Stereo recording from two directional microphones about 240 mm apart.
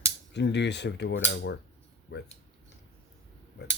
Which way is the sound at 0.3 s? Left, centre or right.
Left.